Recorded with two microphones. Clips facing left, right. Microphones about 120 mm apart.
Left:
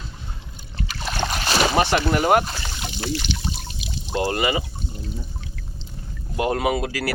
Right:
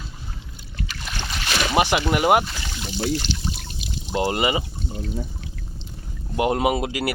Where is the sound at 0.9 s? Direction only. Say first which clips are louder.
Left 9 dB; 40° left (ahead or behind).